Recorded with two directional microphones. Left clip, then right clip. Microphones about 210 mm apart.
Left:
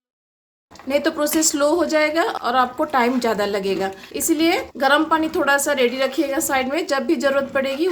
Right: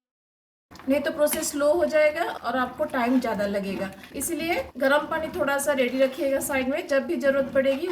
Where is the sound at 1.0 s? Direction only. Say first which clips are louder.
Left 6 dB; 55° left (ahead or behind).